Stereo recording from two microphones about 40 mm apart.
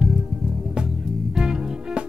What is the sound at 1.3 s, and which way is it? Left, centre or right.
Music, centre.